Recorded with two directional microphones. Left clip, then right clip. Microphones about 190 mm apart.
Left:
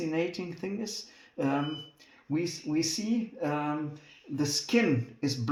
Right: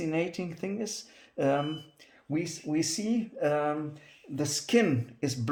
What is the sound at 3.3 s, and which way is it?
Speech, 50° right (ahead or behind).